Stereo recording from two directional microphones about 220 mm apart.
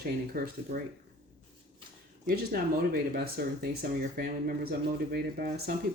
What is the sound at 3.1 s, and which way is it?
Speech, 45° right (ahead or behind).